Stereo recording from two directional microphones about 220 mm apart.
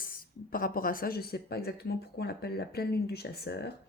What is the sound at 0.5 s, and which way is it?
Speech, 40° left (ahead or behind).